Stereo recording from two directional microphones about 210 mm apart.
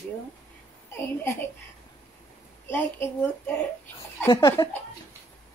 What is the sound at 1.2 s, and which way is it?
Speech, 10° left (ahead or behind).